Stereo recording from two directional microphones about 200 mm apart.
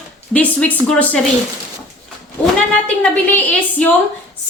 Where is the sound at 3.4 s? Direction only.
5° left (ahead or behind).